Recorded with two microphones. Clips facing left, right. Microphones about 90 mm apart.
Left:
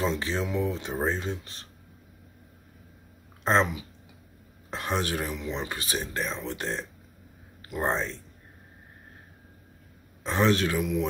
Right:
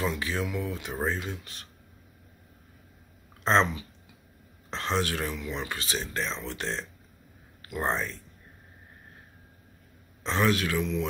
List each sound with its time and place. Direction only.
0.0 s speech: 25° left (ahead or behind)
3.4 s speech: 10° left (ahead or behind)
10.2 s speech: 20° left (ahead or behind)